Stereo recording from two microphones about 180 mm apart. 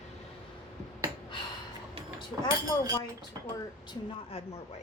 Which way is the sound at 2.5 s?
20° left (ahead or behind).